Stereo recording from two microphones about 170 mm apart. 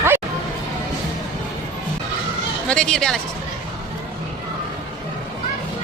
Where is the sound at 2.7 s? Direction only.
5° left (ahead or behind).